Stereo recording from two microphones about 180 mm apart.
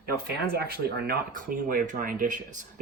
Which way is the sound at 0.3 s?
60° right (ahead or behind).